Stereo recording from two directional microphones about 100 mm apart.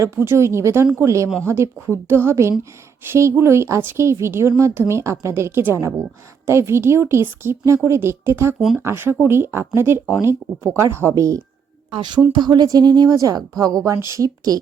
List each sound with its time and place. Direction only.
0.0 s speech: 25° right (ahead or behind)
11.9 s a woman's voice: 50° right (ahead or behind); by 14.6 s 35° right (ahead or behind)